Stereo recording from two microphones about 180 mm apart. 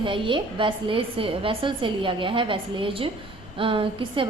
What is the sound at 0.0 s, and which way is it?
A woman's voice, 30° right (ahead or behind).